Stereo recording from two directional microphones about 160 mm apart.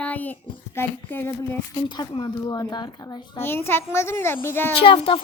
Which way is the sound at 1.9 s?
25° left (ahead or behind).